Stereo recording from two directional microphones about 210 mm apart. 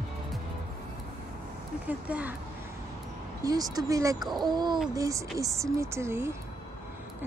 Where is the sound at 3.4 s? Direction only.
15° right (ahead or behind).